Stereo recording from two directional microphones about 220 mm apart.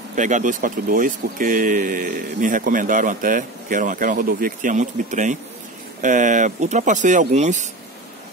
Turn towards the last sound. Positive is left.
turn(degrees=-35)  # may be behind; listen again after turning